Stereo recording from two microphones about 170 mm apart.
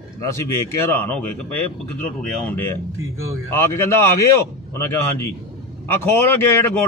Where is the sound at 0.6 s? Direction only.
15° left (ahead or behind).